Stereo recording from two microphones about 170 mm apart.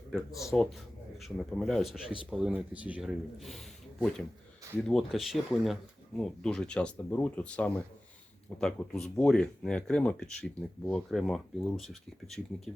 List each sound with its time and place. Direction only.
0.1 s speech: centre (ahead or behind)
4.9 s speech: centre (ahead or behind)